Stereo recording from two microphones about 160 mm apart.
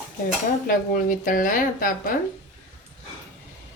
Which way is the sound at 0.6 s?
55° left (ahead or behind).